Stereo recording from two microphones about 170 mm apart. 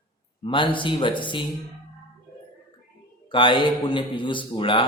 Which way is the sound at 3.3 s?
30° left (ahead or behind).